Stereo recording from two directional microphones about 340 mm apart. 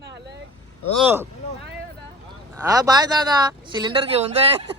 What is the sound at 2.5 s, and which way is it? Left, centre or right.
Speech, centre.